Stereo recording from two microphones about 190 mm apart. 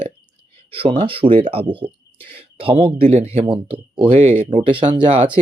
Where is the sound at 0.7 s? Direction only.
25° right (ahead or behind).